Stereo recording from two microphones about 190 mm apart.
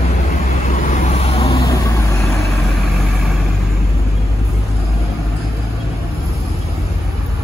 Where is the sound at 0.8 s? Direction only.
35° left (ahead or behind).